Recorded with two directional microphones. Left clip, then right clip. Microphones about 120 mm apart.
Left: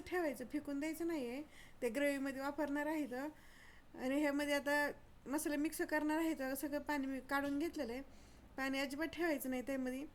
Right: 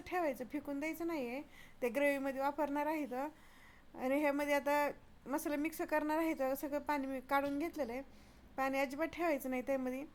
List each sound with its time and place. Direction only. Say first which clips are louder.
0.0 s speech: right 3 dB; 20° right (ahead or behind)